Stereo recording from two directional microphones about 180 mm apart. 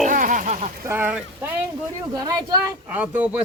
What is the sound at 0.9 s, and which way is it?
Speech, 10° right (ahead or behind).